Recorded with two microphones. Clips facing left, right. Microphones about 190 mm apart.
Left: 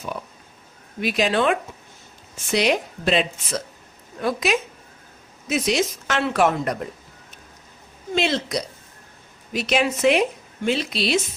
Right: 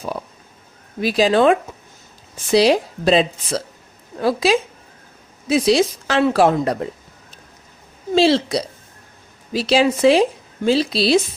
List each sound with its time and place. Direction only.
1.0 s a woman's voice: 35° right (ahead or behind)
8.1 s a woman's voice: 30° right (ahead or behind)